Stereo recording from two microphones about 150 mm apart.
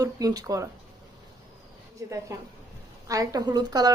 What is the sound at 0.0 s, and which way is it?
Speech, 25° right (ahead or behind).